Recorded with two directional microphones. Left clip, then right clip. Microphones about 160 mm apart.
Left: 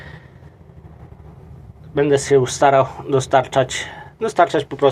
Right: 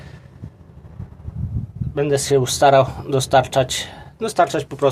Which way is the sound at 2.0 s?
20° right (ahead or behind).